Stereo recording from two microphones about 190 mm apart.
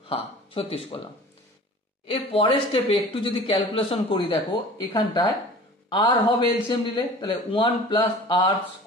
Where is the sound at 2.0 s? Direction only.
30° left (ahead or behind).